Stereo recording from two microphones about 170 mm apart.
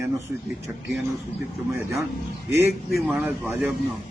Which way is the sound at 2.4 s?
15° right (ahead or behind).